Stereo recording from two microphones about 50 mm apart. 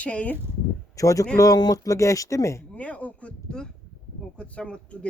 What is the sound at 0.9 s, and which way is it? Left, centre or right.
Speech, left.